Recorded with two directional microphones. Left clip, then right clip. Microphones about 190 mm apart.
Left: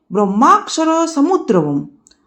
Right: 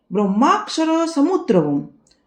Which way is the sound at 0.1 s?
25° left (ahead or behind).